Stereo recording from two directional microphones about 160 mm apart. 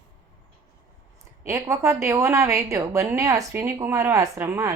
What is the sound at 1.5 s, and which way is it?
A woman's voice, 20° right (ahead or behind).